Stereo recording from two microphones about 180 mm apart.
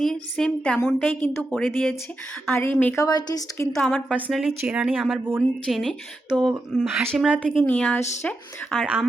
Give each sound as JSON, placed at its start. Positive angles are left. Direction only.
{"t": 0.0, "sound": "a woman's voice", "side_deg": 5}
{"t": 2.5, "sound": "speech", "side_deg": 10}
{"t": 3.0, "sound": "speech", "side_deg": 20}
{"t": 3.7, "sound": "a woman's voice", "side_deg": 5}